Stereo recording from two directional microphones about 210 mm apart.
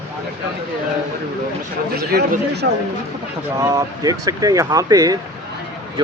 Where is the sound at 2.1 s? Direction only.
45° right (ahead or behind).